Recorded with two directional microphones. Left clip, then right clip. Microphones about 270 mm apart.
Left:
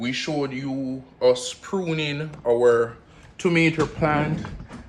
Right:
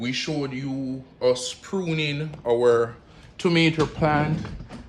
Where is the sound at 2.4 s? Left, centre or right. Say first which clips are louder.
Left 1 dB; centre.